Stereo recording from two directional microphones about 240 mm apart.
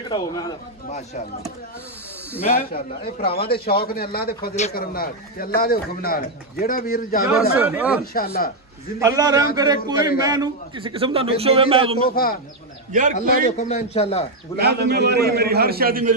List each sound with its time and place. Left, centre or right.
0.1 s speech: centre
0.8 s a man's voice: left
2.5 s a man's voice: left
7.5 s speech: centre
8.0 s a man's voice: left
9.0 s a man's voice: centre
12.1 s a man's voice: left
12.9 s a man's voice: right
13.5 s a man's voice: left
14.6 s a man's voice: right